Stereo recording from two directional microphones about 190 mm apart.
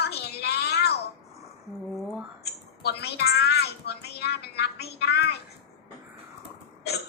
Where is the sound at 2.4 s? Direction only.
60° left (ahead or behind).